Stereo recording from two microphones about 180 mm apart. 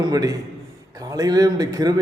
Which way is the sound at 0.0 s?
20° right (ahead or behind).